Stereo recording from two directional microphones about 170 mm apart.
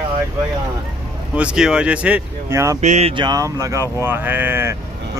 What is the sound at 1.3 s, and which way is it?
Speech, 5° right (ahead or behind).